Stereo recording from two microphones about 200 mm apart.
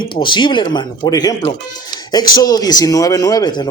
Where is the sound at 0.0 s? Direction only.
25° left (ahead or behind).